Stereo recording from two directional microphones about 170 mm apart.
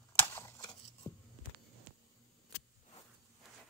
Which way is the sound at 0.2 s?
15° left (ahead or behind).